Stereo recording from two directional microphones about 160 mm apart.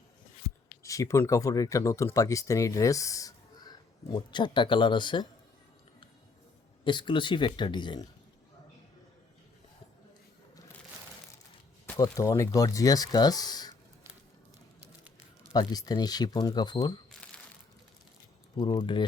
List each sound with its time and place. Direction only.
0.8 s speech: 20° left (ahead or behind)
6.8 s speech: 30° left (ahead or behind)
11.9 s speech: 20° left (ahead or behind)
15.5 s speech: 25° left (ahead or behind)
18.5 s speech: 25° left (ahead or behind)